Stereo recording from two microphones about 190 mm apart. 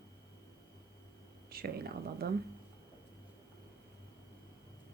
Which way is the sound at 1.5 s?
55° right (ahead or behind).